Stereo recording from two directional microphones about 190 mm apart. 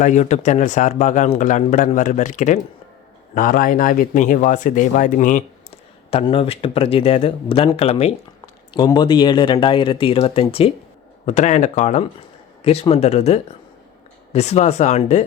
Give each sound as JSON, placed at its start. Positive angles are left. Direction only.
{"t": 0.0, "sound": "speech", "side_deg": 40}
{"t": 6.1, "sound": "speech", "side_deg": 30}